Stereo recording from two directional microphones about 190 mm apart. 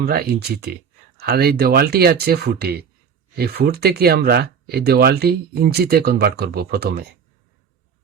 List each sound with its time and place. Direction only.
0.0 s speech: 55° right (ahead or behind)